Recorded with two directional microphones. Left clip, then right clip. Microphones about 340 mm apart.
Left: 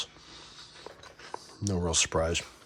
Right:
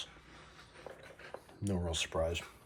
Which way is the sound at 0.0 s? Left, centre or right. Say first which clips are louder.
Left 8 dB; centre.